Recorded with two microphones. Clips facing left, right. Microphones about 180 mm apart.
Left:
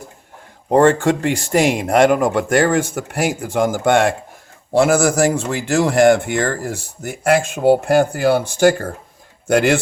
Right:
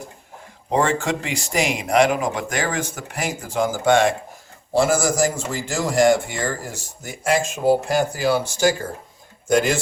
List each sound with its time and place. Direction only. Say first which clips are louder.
0.7 s speech: left 8 dB; 55° left (ahead or behind)